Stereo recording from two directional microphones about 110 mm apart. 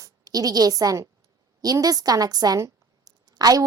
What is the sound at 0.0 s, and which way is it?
A woman's voice, 35° right (ahead or behind).